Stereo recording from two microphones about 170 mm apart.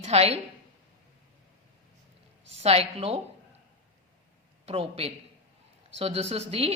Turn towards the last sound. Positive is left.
turn(degrees=-35)  # may be behind; listen again after turning